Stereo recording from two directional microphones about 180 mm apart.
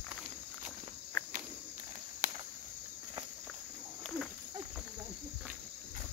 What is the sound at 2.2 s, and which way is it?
Cricket, 45° right (ahead or behind).